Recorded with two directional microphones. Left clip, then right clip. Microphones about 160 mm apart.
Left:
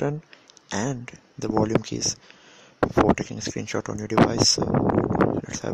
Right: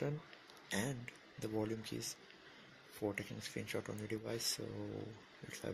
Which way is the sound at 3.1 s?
50° left (ahead or behind).